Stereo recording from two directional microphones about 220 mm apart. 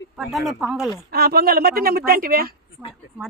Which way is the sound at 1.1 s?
45° right (ahead or behind).